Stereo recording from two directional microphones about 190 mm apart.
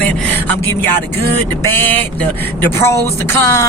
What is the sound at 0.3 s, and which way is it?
Speech, 10° left (ahead or behind).